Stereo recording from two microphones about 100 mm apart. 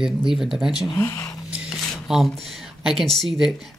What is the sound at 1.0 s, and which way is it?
Speech, 25° left (ahead or behind).